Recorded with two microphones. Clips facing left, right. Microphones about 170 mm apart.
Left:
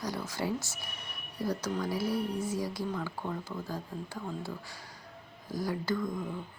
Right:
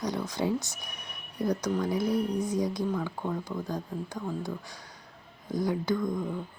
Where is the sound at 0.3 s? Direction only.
20° right (ahead or behind).